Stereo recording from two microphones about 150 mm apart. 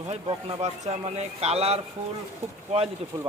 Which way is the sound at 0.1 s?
45° right (ahead or behind).